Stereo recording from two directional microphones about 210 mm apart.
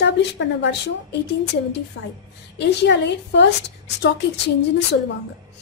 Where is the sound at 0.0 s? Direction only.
55° left (ahead or behind).